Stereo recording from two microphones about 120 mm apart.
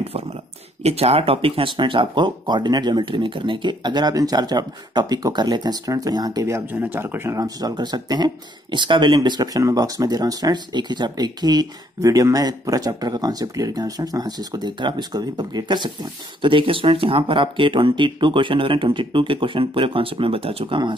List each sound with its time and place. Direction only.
0.0 s a sound: 55° right (ahead or behind)
0.8 s speech: 55° right (ahead or behind); by 7.4 s 20° right (ahead or behind)
7.4 s speech: 35° right (ahead or behind)